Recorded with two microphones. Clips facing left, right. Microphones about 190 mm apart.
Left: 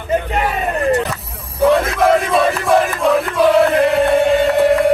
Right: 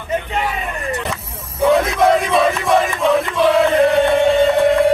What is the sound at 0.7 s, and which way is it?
Vehicle, 60° left (ahead or behind).